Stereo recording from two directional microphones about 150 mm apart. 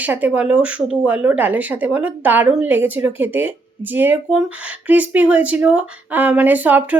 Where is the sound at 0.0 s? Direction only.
10° right (ahead or behind).